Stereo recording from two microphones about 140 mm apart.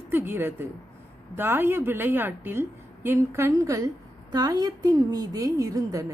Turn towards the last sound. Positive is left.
turn(degrees=-25)  # may be behind; listen again after turning